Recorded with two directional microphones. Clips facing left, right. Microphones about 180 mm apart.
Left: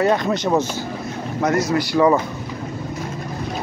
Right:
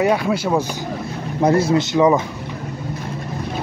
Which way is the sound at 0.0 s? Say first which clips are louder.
Right 1 dB; 10° right (ahead or behind).